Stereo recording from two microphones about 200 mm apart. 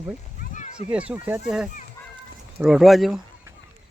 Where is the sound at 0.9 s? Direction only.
5° right (ahead or behind).